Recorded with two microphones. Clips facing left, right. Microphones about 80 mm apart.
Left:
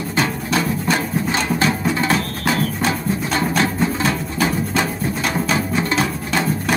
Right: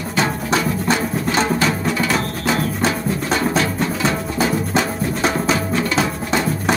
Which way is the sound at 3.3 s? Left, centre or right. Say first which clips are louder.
Even; left.